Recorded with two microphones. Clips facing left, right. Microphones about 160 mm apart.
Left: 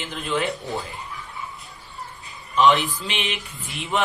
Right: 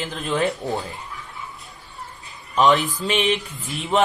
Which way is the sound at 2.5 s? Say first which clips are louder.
Right 1 dB; 45° right (ahead or behind).